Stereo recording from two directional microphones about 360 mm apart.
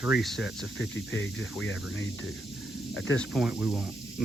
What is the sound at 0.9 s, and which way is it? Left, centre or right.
Speech, left.